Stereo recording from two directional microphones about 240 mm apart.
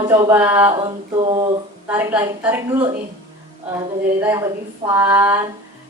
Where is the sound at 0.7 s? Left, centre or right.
Centre.